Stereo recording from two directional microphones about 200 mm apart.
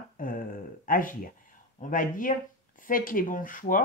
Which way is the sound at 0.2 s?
45° left (ahead or behind).